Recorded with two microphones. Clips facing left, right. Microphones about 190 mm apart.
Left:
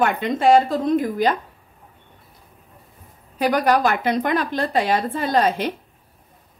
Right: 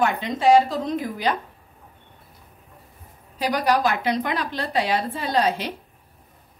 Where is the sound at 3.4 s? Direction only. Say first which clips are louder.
Left 3 dB; 55° left (ahead or behind).